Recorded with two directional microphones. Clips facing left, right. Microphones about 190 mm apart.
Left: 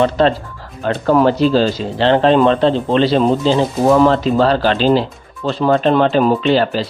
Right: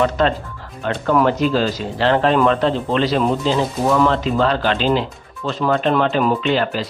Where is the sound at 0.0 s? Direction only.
30° left (ahead or behind).